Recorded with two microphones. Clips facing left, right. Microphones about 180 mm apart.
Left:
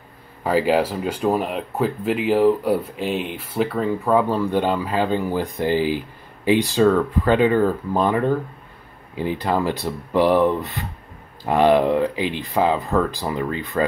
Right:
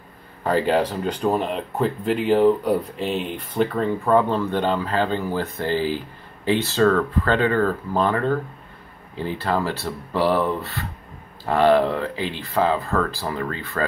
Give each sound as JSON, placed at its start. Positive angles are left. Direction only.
{"t": 0.4, "sound": "speech", "side_deg": 5}